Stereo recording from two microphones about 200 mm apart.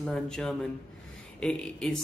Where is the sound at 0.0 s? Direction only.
5° left (ahead or behind).